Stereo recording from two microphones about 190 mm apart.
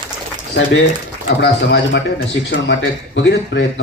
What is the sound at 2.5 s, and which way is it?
Speech, 80° left.